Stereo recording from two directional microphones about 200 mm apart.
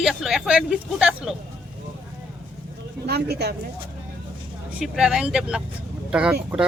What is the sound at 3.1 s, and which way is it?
Speech, 55° right (ahead or behind).